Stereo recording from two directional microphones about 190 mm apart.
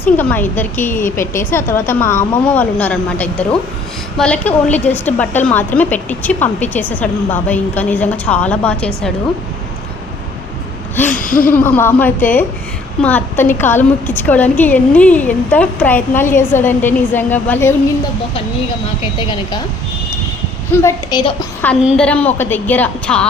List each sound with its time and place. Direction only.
0.0 s a woman's voice: 10° left (ahead or behind)
10.9 s a sound: 10° left (ahead or behind)
11.2 s speech: 45° left (ahead or behind)
11.5 s a woman's voice: 10° left (ahead or behind)
20.8 s a woman's voice: 20° left (ahead or behind)
21.8 s a woman's voice: 5° left (ahead or behind)